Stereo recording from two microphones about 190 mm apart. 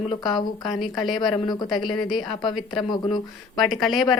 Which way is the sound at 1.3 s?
20° left (ahead or behind).